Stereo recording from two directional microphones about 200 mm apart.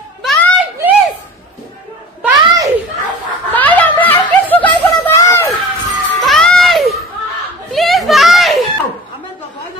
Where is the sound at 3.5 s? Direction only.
10° left (ahead or behind).